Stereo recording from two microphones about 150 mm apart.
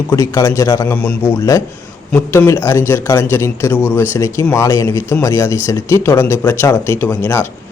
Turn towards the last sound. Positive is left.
turn(degrees=15)  # may be behind; listen again after turning